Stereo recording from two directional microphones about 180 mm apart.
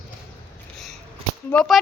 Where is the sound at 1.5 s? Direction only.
Centre (ahead or behind).